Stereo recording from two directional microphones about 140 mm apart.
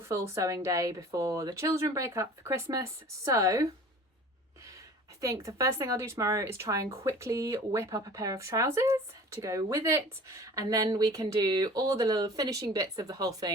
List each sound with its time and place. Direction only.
0.0 s speech: 20° right (ahead or behind)
5.2 s speech: 20° right (ahead or behind)